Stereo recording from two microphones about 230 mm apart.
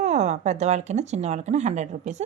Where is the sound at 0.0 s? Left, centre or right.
Right.